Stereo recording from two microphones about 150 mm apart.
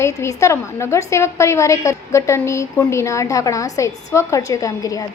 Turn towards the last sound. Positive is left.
turn(degrees=25)  # may be behind; listen again after turning